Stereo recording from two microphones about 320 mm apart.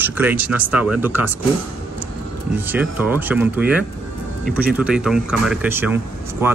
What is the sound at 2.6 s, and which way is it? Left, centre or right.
Speech, centre.